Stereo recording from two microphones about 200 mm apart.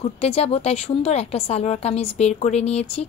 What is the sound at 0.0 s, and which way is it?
Speech, 30° left (ahead or behind).